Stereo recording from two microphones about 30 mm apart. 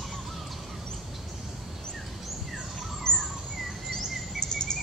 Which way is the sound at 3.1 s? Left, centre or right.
Left.